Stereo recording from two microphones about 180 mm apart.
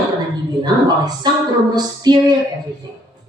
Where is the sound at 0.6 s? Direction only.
25° right (ahead or behind).